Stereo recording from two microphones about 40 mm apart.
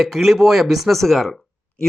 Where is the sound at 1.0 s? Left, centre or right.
Centre.